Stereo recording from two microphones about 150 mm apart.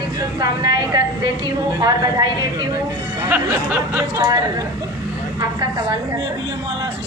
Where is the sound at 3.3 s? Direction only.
15° right (ahead or behind).